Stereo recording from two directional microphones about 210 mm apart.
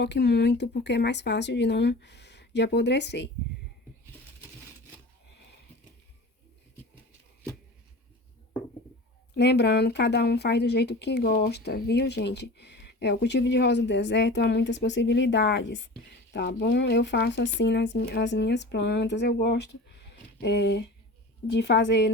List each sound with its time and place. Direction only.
0.0 s speech: 55° left (ahead or behind)
9.3 s speech: 55° left (ahead or behind)